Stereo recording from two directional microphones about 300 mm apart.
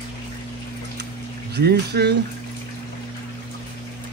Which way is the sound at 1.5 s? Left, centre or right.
Right.